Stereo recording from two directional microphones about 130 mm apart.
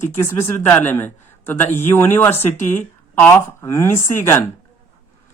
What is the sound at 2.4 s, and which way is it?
Speech, 75° left (ahead or behind).